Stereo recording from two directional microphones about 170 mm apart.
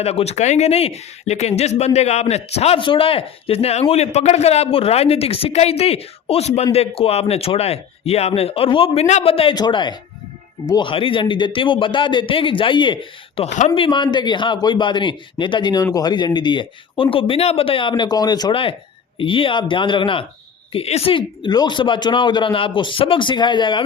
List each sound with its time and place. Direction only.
0.0 s a man's voice: 35° left (ahead or behind)